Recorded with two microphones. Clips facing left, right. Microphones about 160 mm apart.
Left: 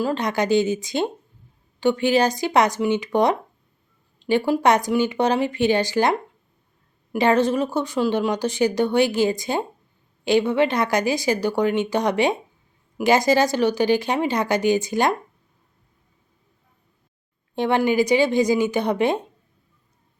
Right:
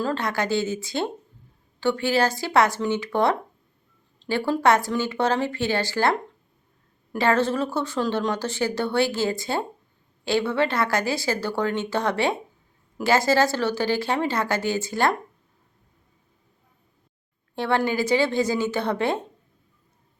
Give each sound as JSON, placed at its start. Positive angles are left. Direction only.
{"t": 0.0, "sound": "a woman's voice", "side_deg": 15}
{"t": 17.5, "sound": "a woman's voice", "side_deg": 20}